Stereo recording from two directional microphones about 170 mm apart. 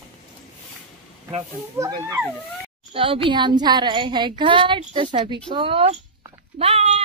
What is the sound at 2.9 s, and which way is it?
Speech, 30° right (ahead or behind).